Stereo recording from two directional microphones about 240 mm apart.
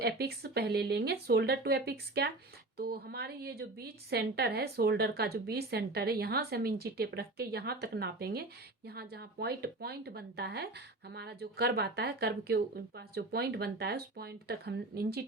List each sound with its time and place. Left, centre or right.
0.0 s a woman's voice: right